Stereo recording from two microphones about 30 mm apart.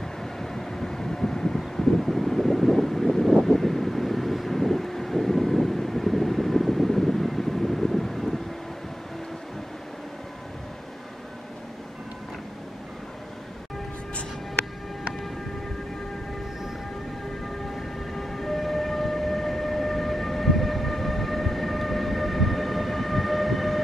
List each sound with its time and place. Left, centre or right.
0.2 s vehicle: centre
1.8 s wind: centre
3.4 s vehicle: centre
18.1 s siren: centre